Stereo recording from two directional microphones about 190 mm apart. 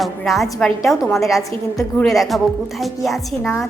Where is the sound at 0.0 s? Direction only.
Centre (ahead or behind).